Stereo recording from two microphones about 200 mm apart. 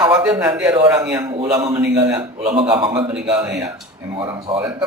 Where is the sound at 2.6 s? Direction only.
25° right (ahead or behind).